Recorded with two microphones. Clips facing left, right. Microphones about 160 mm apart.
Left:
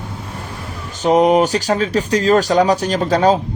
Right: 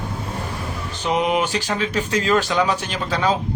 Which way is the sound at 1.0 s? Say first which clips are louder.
Left 8 dB; 40° left (ahead or behind).